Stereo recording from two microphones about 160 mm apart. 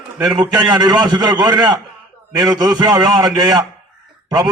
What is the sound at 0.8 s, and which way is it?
A man's voice, 25° right (ahead or behind).